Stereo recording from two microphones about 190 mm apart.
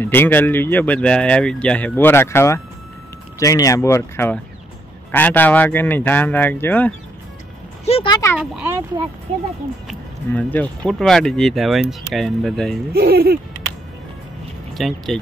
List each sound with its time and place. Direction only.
0.0 s speech: 10° left (ahead or behind)
7.8 s speech: 30° left (ahead or behind)
8.4 s speech: 10° right (ahead or behind)
9.8 s speech: 10° left (ahead or behind)
12.9 s speech: 55° right (ahead or behind)
14.7 s speech: centre (ahead or behind)